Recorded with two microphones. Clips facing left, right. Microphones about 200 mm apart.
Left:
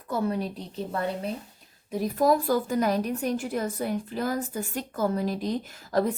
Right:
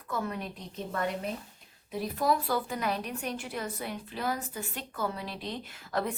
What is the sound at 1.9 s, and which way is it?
A woman's voice, 45° left (ahead or behind).